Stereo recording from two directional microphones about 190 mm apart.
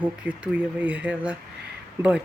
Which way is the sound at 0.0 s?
5° right (ahead or behind).